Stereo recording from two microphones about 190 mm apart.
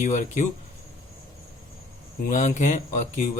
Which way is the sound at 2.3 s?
40° left (ahead or behind).